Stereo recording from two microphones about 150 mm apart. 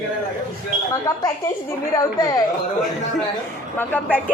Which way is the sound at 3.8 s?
10° left (ahead or behind).